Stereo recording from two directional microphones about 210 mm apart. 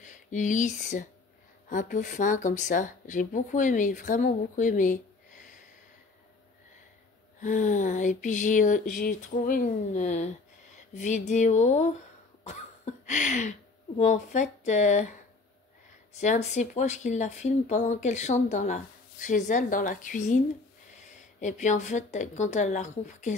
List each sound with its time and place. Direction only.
0.0 s speech: 35° left (ahead or behind)
7.3 s speech: 35° left (ahead or behind)
16.2 s speech: 35° left (ahead or behind)
21.4 s speech: 35° left (ahead or behind)